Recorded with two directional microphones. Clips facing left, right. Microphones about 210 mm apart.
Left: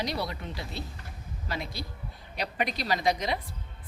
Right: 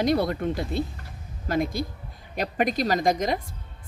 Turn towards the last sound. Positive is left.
turn(degrees=-45)  # may be behind; listen again after turning